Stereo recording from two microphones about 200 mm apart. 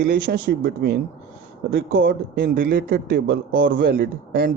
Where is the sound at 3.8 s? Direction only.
50° right (ahead or behind).